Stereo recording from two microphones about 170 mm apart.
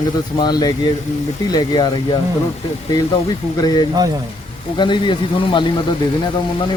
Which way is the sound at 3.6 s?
25° left (ahead or behind).